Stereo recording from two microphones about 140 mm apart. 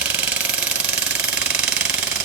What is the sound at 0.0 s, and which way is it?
Jackhammer, 10° right (ahead or behind).